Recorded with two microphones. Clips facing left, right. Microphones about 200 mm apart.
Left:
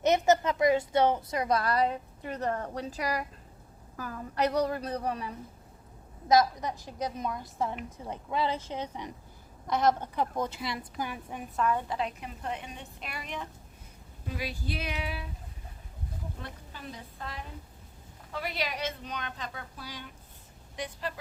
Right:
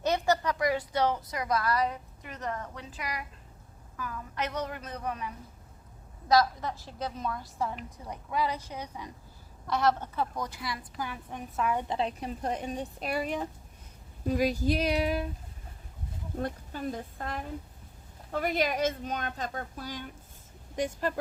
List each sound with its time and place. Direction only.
0.0 s a woman's voice: 20° left (ahead or behind)
6.2 s a woman's voice: 20° left (ahead or behind)
11.3 s a woman's voice: 5° left (ahead or behind)
11.6 s a woman's voice: 15° right (ahead or behind)
11.9 s a woman's voice: 35° right (ahead or behind)
16.4 s speech: 45° right (ahead or behind)